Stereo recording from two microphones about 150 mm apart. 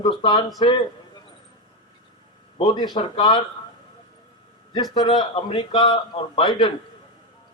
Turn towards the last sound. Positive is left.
turn(degrees=30)  # may be behind; listen again after turning